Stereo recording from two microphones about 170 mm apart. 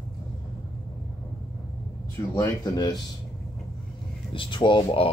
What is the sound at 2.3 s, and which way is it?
Speech, 25° left (ahead or behind).